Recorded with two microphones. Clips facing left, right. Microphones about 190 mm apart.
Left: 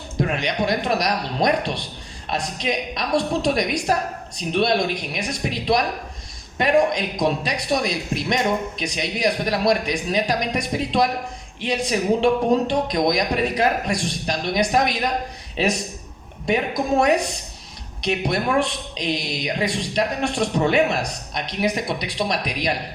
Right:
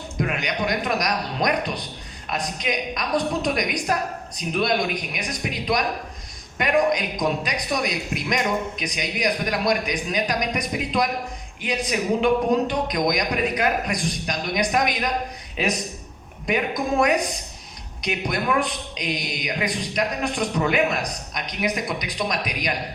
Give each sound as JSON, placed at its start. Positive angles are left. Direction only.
{"t": 0.2, "sound": "a man's voice", "side_deg": 30}
{"t": 18.0, "sound": "a man's voice", "side_deg": 30}